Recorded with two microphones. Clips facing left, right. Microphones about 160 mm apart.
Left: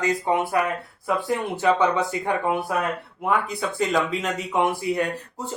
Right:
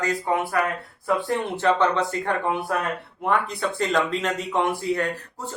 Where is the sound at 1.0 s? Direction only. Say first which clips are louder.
Right 1 dB; centre (ahead or behind).